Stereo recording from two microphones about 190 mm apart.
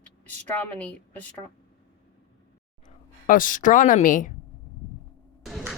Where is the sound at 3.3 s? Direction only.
45° left (ahead or behind).